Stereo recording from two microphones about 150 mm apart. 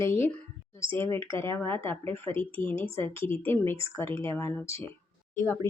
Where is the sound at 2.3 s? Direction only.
35° right (ahead or behind).